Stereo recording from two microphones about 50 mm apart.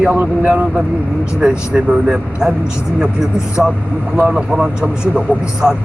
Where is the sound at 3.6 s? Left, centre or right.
Centre.